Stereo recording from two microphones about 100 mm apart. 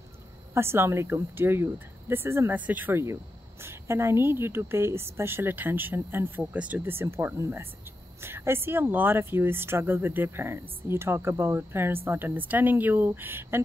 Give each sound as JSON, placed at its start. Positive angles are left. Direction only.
{"t": 0.6, "sound": "speech", "side_deg": -25}